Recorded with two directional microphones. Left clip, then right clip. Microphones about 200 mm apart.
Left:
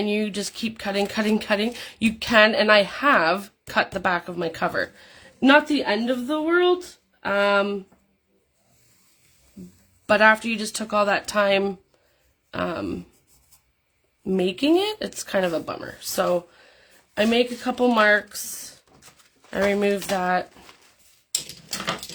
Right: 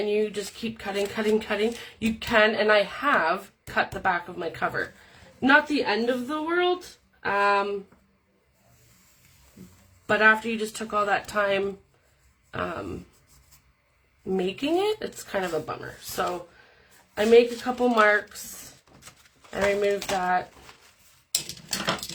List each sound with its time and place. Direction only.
0.0 s speech: 50° left (ahead or behind)
10.1 s speech: 50° left (ahead or behind)
14.3 s speech: 45° left (ahead or behind)
19.5 s speech: 55° left (ahead or behind)